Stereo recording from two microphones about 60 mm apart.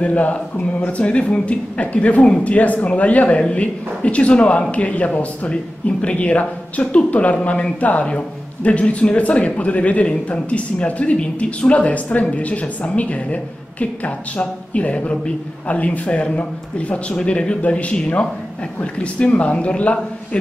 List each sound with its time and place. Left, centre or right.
0.0 s a man's voice: left